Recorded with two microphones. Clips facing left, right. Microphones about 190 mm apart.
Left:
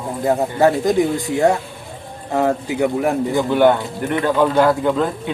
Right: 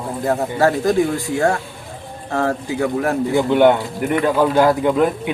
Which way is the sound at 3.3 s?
15° right (ahead or behind).